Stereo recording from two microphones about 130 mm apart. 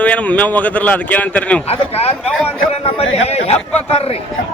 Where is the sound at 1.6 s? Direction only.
50° left (ahead or behind).